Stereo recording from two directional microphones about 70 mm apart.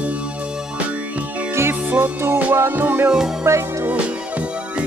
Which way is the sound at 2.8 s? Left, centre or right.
Right.